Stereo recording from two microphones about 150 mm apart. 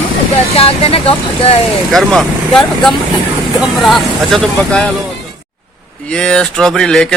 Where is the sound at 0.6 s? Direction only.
40° left (ahead or behind).